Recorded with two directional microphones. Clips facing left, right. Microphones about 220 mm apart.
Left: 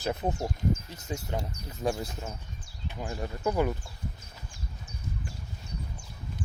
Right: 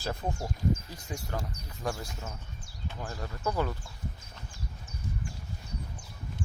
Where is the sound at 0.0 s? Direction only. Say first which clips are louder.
Left 4 dB; 20° left (ahead or behind).